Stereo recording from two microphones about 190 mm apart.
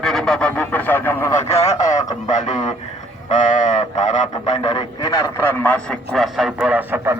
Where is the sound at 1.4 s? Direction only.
35° left (ahead or behind).